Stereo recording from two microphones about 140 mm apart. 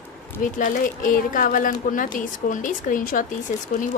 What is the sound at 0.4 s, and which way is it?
Speech, 70° left (ahead or behind).